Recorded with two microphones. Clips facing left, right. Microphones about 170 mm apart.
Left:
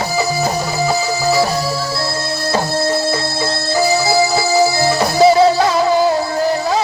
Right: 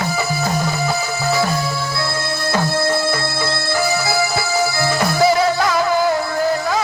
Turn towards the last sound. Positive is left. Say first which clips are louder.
# left 3 dB
turn(degrees=25)  # may be behind; listen again after turning